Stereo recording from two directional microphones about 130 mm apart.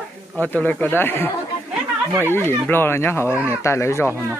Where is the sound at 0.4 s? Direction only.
10° left (ahead or behind).